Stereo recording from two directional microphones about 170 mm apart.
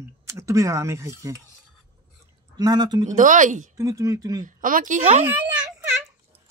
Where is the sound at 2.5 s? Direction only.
25° right (ahead or behind).